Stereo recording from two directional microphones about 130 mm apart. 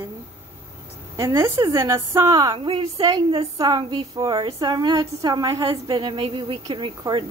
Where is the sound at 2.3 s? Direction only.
40° right (ahead or behind).